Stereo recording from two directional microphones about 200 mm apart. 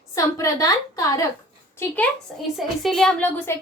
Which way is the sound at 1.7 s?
10° left (ahead or behind).